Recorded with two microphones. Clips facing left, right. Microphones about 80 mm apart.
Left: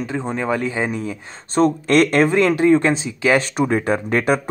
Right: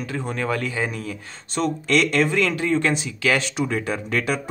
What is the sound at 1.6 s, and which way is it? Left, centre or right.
Speech, left.